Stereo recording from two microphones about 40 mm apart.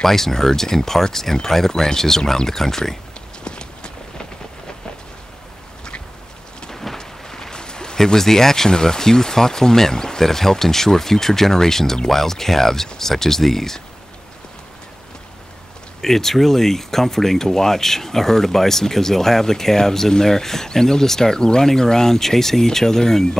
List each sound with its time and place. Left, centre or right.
0.0 s speech: centre
3.4 s clip-clop: left
6.7 s speech: centre
16.0 s speech: centre